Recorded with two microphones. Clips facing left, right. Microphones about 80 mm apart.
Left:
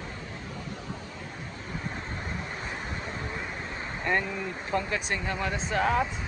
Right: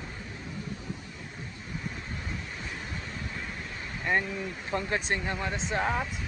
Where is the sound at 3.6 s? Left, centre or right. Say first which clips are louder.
Left 4 dB; left.